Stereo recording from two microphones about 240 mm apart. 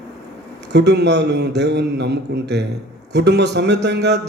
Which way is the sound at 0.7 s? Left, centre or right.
Right.